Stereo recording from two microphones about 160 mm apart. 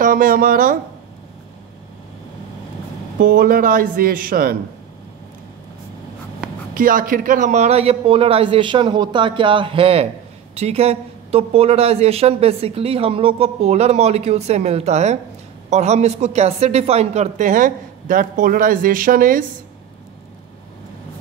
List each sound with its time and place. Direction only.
0.0 s speech: 60° right (ahead or behind)
3.2 s speech: 65° right (ahead or behind)
6.7 s speech: 60° right (ahead or behind)